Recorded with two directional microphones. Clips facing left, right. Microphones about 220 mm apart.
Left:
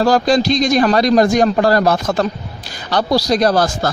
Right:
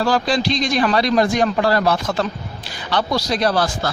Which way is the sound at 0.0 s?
40° left (ahead or behind).